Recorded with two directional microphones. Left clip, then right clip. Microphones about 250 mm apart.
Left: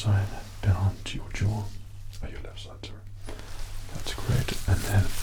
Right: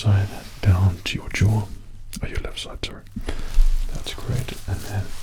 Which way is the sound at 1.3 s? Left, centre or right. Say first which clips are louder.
Right 11 dB; right.